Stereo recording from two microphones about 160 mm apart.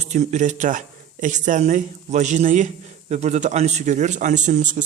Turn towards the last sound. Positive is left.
turn(degrees=-50)  # may be behind; listen again after turning